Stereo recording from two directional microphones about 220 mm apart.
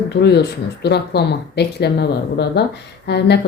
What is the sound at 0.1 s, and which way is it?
Speech, 50° left (ahead or behind).